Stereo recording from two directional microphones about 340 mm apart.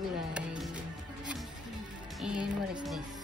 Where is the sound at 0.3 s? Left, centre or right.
Centre.